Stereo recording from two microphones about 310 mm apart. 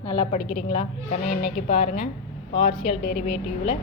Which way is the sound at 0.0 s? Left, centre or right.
Centre.